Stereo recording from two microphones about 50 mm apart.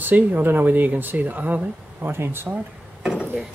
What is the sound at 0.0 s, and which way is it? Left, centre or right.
Speech, right.